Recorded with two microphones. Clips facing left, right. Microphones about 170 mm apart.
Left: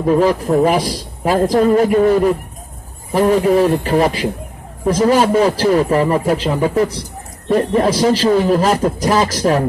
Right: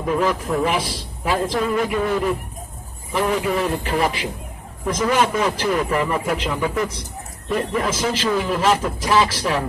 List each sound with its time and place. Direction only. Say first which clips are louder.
0.0 s a man's voice: left 7 dB; 35° left (ahead or behind)